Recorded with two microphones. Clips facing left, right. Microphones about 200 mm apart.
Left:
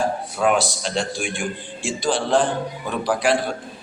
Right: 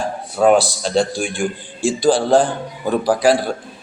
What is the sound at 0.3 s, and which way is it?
Mantra, 35° right (ahead or behind).